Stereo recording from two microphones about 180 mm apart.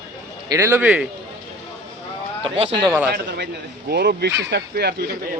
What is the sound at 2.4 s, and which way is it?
Speech, 30° right (ahead or behind).